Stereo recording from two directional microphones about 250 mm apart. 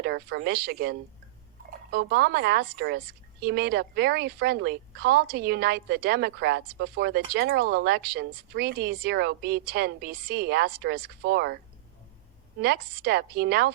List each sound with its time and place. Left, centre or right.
0.0 s a woman's voice: right
12.6 s a woman's voice: right